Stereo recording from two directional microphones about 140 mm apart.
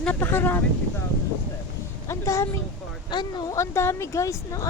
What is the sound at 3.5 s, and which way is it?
Speech, 20° left (ahead or behind).